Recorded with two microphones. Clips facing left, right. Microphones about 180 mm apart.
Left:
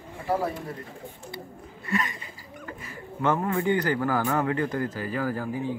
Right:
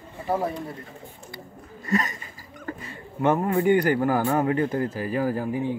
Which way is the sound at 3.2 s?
20° right (ahead or behind).